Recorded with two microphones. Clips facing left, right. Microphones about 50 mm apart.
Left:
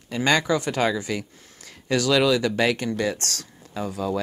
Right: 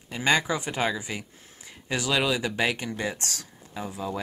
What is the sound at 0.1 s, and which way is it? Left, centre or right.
Speech, centre.